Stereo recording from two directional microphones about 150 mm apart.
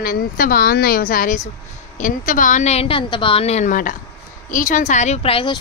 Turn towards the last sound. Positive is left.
turn(degrees=35)  # may be behind; listen again after turning